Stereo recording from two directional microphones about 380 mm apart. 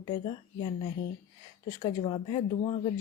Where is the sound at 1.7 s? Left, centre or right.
Centre.